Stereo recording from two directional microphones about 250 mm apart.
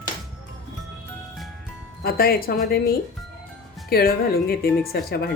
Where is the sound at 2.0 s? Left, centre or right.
Left.